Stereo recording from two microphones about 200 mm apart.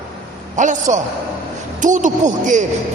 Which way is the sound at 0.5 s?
40° right (ahead or behind).